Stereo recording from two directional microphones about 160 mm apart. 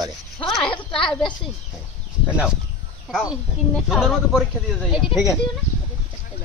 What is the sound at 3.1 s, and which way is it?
Speech, centre (ahead or behind).